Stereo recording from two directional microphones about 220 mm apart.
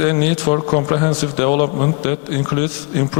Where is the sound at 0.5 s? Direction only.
30° left (ahead or behind).